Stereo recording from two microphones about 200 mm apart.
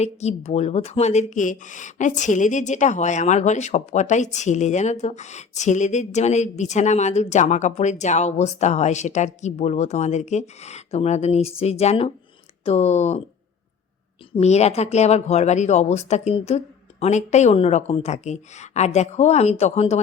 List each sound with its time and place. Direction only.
0.0 s speech: 35° left (ahead or behind)
14.3 s speech: 35° left (ahead or behind)